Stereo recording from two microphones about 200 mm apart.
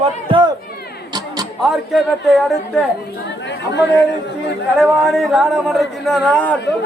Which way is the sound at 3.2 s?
60° left (ahead or behind).